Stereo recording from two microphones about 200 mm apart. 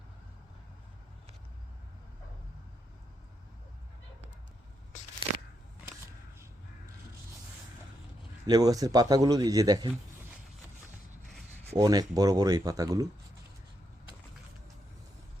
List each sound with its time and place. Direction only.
8.4 s a man's voice: 20° right (ahead or behind)
11.8 s speech: 20° right (ahead or behind)